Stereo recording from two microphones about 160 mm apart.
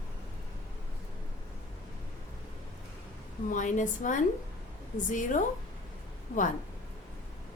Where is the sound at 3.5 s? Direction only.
50° left (ahead or behind).